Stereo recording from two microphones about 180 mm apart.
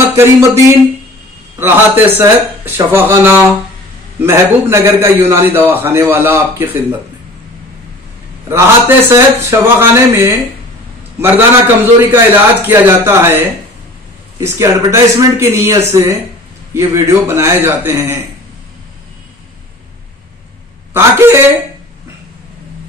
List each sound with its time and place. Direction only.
0.1 s a man's voice: 15° right (ahead or behind)
8.5 s a man's voice: 15° right (ahead or behind)
20.9 s a man's voice: 15° right (ahead or behind)